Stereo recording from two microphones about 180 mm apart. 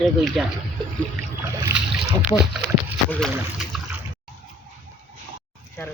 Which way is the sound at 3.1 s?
Centre (ahead or behind).